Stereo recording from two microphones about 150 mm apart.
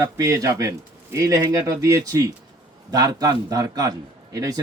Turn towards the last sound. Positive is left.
turn(degrees=-25)  # may be behind; listen again after turning